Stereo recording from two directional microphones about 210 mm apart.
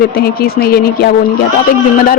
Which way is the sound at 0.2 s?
45° left (ahead or behind).